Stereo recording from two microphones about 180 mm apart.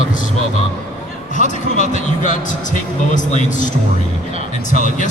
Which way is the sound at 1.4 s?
45° left (ahead or behind).